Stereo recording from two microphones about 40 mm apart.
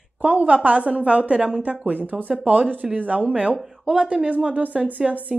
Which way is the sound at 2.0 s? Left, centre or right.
Right.